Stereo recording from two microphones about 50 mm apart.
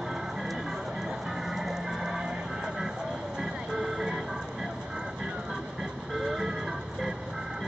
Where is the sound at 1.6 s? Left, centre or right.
Centre.